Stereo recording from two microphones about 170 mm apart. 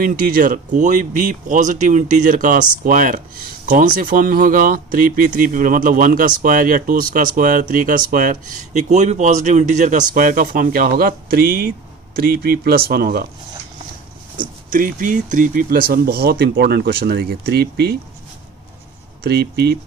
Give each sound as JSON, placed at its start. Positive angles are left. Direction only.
{"t": 0.0, "sound": "speech", "side_deg": -55}
{"t": 14.3, "sound": "speech", "side_deg": -55}
{"t": 19.2, "sound": "speech", "side_deg": -70}